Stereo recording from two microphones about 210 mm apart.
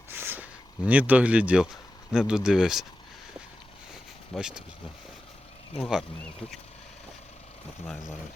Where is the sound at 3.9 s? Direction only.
5° right (ahead or behind).